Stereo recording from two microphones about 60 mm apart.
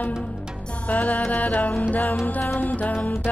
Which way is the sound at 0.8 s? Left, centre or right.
Left.